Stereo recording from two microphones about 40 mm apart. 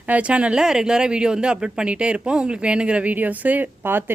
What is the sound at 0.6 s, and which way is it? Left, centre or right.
Speech, centre.